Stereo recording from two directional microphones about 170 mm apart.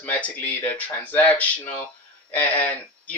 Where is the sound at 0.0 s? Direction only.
10° left (ahead or behind).